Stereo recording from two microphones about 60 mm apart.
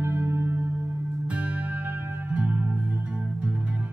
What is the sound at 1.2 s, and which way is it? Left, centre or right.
Music, right.